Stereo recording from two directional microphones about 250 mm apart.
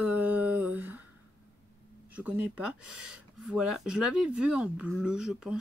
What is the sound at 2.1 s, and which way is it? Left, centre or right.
Speech, centre.